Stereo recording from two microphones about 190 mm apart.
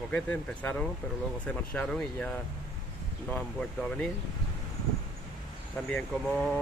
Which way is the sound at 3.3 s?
5° left (ahead or behind).